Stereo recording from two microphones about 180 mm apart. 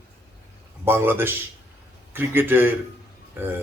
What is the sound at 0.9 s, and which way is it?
A man's voice, 10° right (ahead or behind).